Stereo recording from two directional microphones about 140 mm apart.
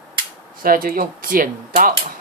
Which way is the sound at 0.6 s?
90° right.